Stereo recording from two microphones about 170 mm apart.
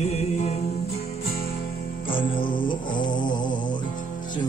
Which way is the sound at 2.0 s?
30° left (ahead or behind).